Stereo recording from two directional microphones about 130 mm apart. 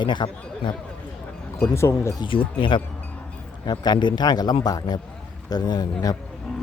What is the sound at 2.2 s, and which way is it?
A man's voice, 40° left (ahead or behind).